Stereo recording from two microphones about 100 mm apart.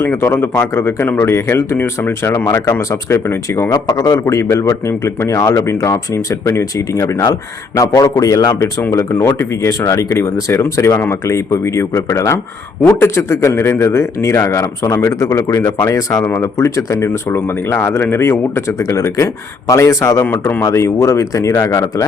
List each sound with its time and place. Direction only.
0.0 s speech: 25° left (ahead or behind)
3.7 s a man's voice: 40° left (ahead or behind)
4.1 s a man's voice: 30° left (ahead or behind)
20.2 s speech: 20° left (ahead or behind)
20.6 s a man's voice: 30° left (ahead or behind)